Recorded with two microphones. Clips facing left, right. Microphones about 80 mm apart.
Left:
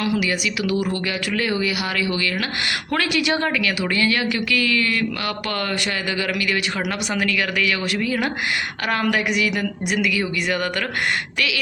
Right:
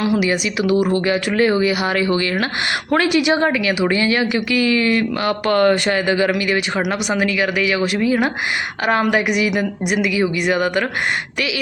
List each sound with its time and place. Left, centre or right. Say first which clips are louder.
0.0 s speech: right 4 dB; right